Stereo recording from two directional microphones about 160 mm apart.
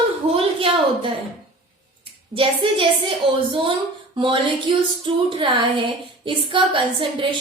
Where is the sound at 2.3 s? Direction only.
35° right (ahead or behind).